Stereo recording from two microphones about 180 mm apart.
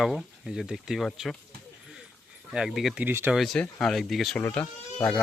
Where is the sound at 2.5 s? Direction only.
5° right (ahead or behind).